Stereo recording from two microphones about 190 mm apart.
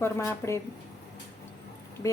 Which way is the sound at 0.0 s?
15° left (ahead or behind).